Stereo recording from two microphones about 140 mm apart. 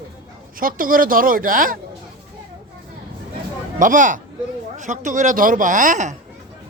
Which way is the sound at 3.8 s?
70° right (ahead or behind).